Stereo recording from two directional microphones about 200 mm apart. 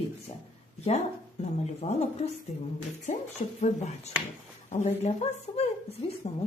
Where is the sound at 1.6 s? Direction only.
35° left (ahead or behind).